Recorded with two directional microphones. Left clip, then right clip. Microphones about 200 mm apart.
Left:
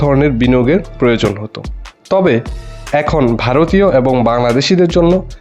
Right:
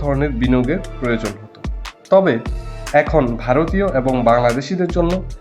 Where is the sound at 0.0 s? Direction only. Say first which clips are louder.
Left 7 dB; 40° left (ahead or behind).